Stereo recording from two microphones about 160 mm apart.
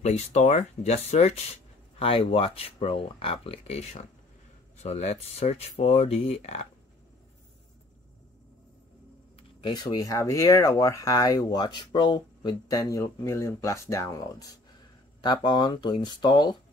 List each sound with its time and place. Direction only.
0.0 s speech: 45° left (ahead or behind)
9.4 s speech: 30° left (ahead or behind)